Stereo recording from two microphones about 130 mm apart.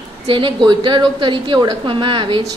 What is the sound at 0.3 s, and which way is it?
A woman's voice, 40° right (ahead or behind).